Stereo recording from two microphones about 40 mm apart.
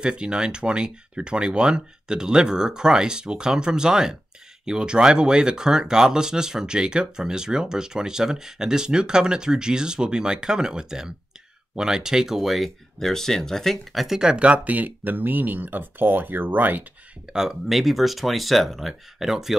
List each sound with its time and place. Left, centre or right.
0.0 s speech: right; by 12.7 s centre
13.0 s speech: centre
13.9 s speech: centre
14.2 s speech: right
14.7 s speech: right
17.3 s speech: centre